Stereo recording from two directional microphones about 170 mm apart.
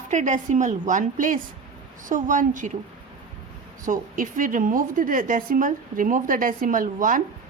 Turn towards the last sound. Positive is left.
turn(degrees=-50)  # may be behind; listen again after turning